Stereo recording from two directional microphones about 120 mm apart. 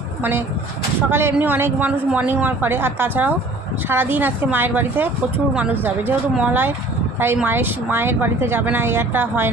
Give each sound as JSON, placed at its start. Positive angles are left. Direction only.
{"t": 0.2, "sound": "a man's voice", "side_deg": -20}